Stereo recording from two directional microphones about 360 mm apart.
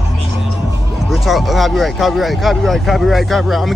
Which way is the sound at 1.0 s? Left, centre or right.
Centre.